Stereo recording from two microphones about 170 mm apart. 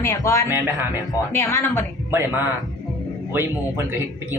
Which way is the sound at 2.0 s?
15° right (ahead or behind).